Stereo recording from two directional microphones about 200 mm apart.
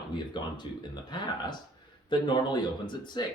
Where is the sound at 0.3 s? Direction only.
20° left (ahead or behind).